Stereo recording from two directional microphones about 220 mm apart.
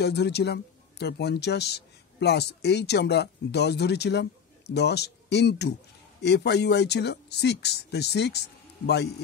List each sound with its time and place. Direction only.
0.0 s speech: 50° left (ahead or behind)